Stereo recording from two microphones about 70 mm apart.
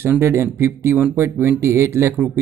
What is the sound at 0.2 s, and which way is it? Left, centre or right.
Speech, right.